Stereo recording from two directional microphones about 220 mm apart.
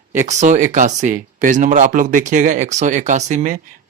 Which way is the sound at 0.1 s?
35° right (ahead or behind).